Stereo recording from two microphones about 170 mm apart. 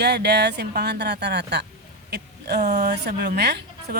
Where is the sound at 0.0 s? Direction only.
80° right.